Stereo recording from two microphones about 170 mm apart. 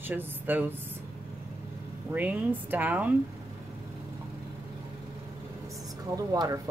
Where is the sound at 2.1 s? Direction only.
10° right (ahead or behind).